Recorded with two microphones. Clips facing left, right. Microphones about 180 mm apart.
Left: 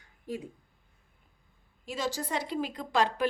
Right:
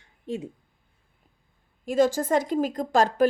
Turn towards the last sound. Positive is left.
turn(degrees=-45)  # may be behind; listen again after turning